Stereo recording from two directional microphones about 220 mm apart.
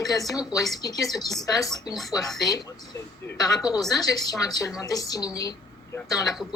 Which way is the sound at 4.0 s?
15° left (ahead or behind).